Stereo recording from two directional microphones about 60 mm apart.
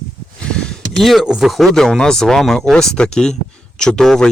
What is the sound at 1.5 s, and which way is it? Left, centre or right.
Speech, centre.